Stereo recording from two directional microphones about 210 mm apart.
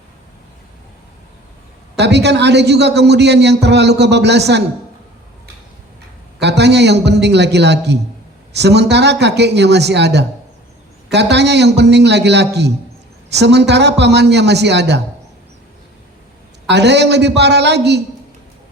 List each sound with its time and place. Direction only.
2.0 s a man's voice: 55° right (ahead or behind)
6.4 s a man's voice: 55° right (ahead or behind)
16.6 s a man's voice: 55° right (ahead or behind)